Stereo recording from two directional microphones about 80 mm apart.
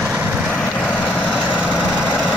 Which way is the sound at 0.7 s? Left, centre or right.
Centre.